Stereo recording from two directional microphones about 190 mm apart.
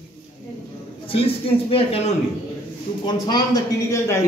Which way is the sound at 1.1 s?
30° left (ahead or behind).